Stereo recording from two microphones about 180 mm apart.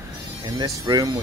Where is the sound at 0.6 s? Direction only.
20° right (ahead or behind).